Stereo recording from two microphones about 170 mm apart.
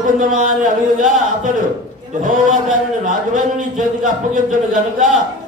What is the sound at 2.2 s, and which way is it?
Speech, 50° right (ahead or behind).